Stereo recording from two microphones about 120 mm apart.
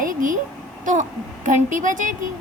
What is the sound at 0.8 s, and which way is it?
A woman's voice, 90° right.